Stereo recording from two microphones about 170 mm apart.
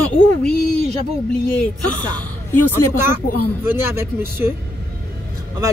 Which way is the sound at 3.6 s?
15° right (ahead or behind).